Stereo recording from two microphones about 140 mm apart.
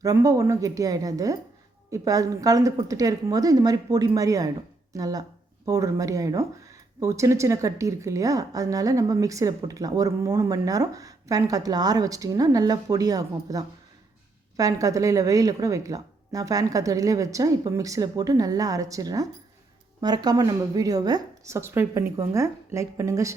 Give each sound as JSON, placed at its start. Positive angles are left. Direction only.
{"t": 0.0, "sound": "a woman's voice", "side_deg": -25}